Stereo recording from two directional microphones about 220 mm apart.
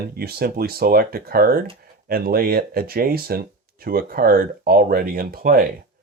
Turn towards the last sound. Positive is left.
turn(degrees=-40)  # may be behind; listen again after turning